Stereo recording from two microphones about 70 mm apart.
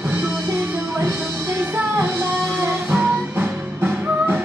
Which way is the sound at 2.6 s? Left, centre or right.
Right.